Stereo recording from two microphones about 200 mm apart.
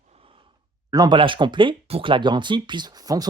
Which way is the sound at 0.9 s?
20° right (ahead or behind).